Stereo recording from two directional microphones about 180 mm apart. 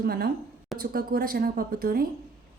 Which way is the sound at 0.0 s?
60° right (ahead or behind).